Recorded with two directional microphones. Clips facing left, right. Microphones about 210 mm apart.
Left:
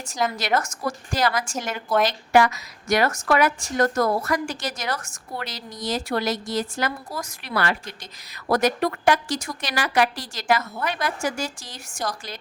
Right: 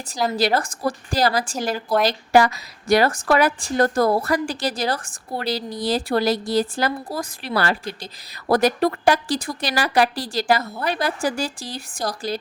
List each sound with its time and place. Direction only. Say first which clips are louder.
0.1 s a woman's voice: right 3 dB; 35° right (ahead or behind)